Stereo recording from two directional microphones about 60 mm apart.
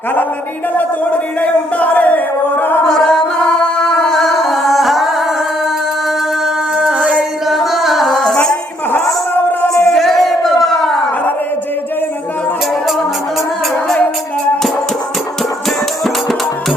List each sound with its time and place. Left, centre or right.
1.4 s music: left
2.8 s singing: centre
6.7 s music: centre
7.4 s singing: centre
9.3 s music: left
9.6 s a sound: centre